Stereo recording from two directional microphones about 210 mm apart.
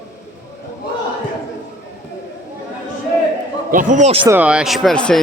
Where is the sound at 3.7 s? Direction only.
40° right (ahead or behind).